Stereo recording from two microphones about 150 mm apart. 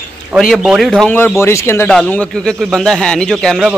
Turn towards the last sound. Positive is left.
turn(degrees=0)  # may be behind; listen again after turning